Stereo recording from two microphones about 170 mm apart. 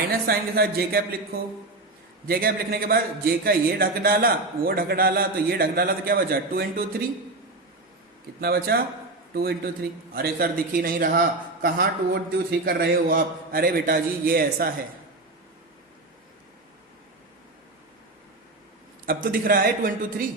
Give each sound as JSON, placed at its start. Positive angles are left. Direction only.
{"t": 0.3, "sound": "speech", "side_deg": -65}
{"t": 2.2, "sound": "a man's voice", "side_deg": -60}
{"t": 8.4, "sound": "a man's voice", "side_deg": -65}
{"t": 19.0, "sound": "a man's voice", "side_deg": -55}